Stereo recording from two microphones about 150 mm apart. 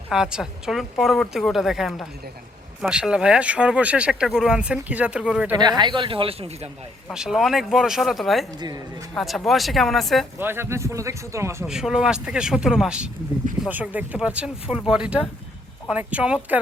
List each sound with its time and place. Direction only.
0.1 s a woman's voice: 5° right (ahead or behind)
5.5 s speech: 30° right (ahead or behind)
7.1 s a woman's voice: 5° right (ahead or behind)
10.4 s speech: 15° right (ahead or behind)
11.6 s a woman's voice: 5° right (ahead or behind)